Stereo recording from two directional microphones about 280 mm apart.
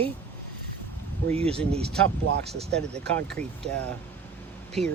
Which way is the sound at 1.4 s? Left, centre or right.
Centre.